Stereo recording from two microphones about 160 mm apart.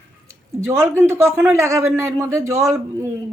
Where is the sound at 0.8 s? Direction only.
15° right (ahead or behind).